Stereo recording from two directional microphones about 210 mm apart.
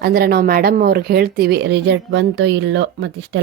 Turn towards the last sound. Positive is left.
turn(degrees=-60)  # may be behind; listen again after turning